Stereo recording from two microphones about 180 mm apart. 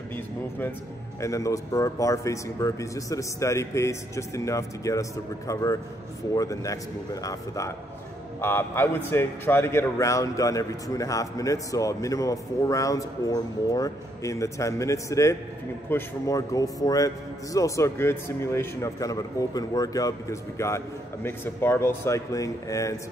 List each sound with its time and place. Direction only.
0.1 s a man's voice: 10° left (ahead or behind)